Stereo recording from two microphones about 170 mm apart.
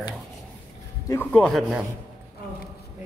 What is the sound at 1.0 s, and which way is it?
Speech, 10° left (ahead or behind).